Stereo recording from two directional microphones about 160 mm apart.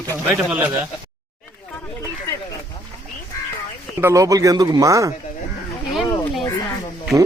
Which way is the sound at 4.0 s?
20° right (ahead or behind).